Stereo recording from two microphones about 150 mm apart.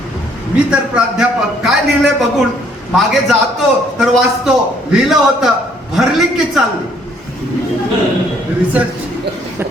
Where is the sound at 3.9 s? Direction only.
Centre (ahead or behind).